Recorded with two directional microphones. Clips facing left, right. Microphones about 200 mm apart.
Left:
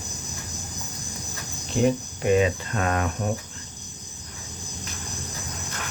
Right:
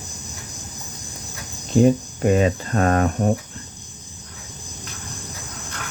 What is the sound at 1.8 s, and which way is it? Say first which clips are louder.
Cricket: right 1 dB; 40° right (ahead or behind).